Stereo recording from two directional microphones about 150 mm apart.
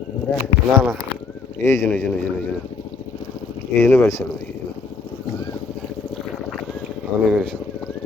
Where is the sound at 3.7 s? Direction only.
15° left (ahead or behind).